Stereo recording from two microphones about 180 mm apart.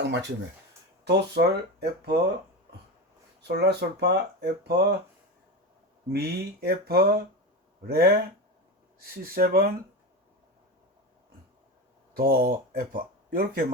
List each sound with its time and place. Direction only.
0.0 s speech: 80° right
1.0 s speech: 65° right (ahead or behind)
3.4 s speech: 65° right (ahead or behind)
6.1 s speech: 60° right (ahead or behind)
12.1 s speech: 55° right (ahead or behind)